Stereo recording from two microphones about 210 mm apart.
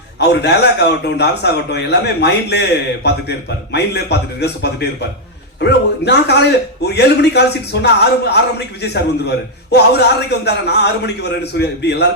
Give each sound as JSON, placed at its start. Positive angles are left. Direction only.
{"t": 0.2, "sound": "a man's voice", "side_deg": 50}